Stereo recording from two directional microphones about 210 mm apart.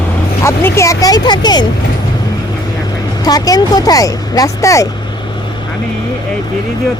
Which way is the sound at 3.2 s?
15° left (ahead or behind).